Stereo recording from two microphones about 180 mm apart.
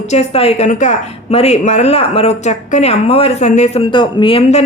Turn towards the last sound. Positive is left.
turn(degrees=30)  # may be behind; listen again after turning